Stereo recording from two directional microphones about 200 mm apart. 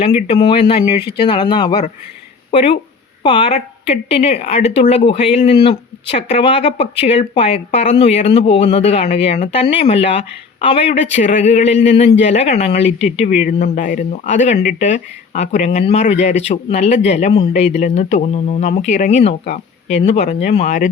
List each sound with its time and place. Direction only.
0.0 s speech: 30° left (ahead or behind)